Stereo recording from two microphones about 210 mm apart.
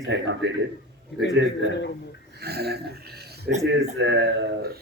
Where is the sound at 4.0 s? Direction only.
60° right (ahead or behind).